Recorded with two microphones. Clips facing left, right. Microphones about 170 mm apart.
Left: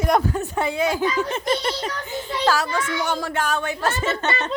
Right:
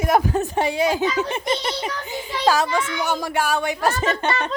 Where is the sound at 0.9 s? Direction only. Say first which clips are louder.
Right 1 dB; 20° right (ahead or behind).